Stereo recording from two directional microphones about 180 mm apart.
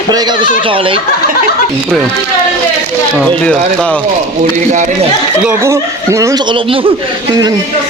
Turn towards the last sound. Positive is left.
turn(degrees=-30)  # may be behind; listen again after turning